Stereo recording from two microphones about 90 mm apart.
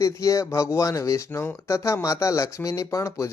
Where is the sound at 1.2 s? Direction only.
25° left (ahead or behind).